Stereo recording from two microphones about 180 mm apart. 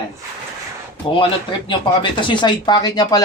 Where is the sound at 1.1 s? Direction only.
30° left (ahead or behind).